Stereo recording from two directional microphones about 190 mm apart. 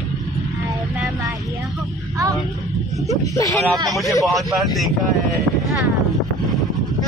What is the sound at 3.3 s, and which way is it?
Speech, 15° left (ahead or behind).